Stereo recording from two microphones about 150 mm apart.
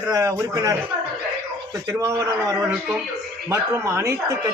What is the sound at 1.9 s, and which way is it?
A man's voice, 20° right (ahead or behind).